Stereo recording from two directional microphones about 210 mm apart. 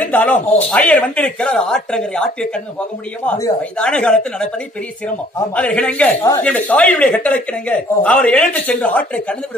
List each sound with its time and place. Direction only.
0.0 s speech: 5° left (ahead or behind)
3.3 s speech: 15° left (ahead or behind)
3.7 s speech: 5° left (ahead or behind)